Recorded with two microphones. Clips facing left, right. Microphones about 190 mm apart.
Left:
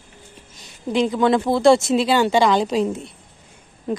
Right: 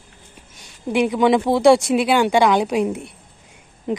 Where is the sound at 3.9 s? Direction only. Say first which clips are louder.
Right 1 dB; 20° right (ahead or behind).